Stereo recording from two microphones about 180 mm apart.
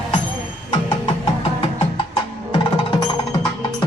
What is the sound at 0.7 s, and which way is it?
Music, 25° left (ahead or behind).